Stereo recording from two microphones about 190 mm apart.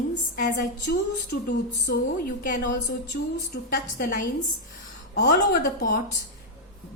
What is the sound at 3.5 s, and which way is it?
Speech, 55° left (ahead or behind).